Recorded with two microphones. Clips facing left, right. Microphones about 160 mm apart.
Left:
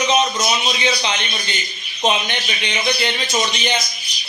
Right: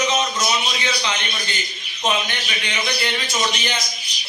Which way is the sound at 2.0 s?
20° left (ahead or behind).